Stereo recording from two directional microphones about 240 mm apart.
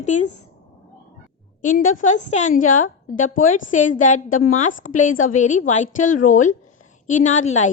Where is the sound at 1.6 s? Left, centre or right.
Left.